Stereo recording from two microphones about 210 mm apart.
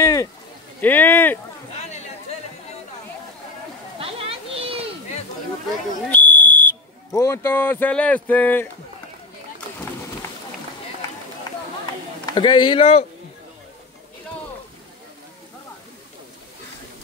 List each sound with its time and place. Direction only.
0.0 s a sound: 15° left (ahead or behind)
0.7 s speech: 10° left (ahead or behind)
4.0 s children playing: 25° right (ahead or behind)
6.0 s speech: 10° left (ahead or behind)
12.4 s speech: 25° left (ahead or behind)